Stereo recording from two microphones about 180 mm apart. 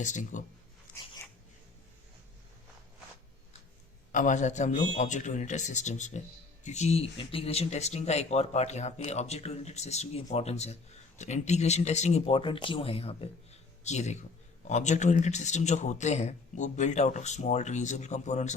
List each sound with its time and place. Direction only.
0.0 s speech: 45° left (ahead or behind)
4.1 s a man's voice: 45° left (ahead or behind)